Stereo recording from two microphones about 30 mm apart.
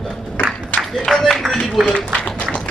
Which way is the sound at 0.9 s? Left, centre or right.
Centre.